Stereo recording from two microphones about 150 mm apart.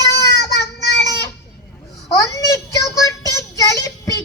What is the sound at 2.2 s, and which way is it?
Child singing, 20° left (ahead or behind).